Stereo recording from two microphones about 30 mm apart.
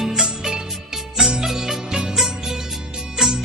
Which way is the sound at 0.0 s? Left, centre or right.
Centre.